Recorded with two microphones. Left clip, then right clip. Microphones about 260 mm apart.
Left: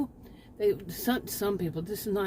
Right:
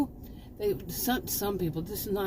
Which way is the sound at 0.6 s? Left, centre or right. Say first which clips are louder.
Left 3 dB; left.